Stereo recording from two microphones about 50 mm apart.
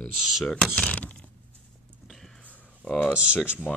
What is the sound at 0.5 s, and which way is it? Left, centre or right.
Speech, centre.